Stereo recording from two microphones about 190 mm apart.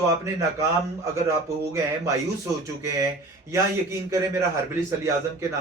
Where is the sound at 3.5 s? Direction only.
15° right (ahead or behind).